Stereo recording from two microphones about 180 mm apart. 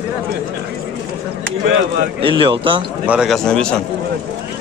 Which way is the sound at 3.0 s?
Centre (ahead or behind).